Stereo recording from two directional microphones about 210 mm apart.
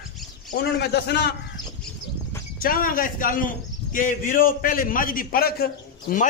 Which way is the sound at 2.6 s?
40° left (ahead or behind).